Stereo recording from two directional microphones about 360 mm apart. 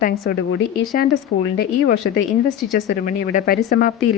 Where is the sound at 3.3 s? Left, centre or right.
Left.